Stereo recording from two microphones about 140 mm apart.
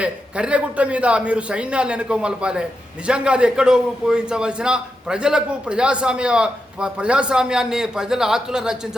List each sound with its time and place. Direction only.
0.0 s a man's voice: 10° right (ahead or behind)